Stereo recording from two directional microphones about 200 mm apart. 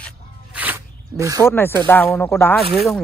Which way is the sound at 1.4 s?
10° left (ahead or behind).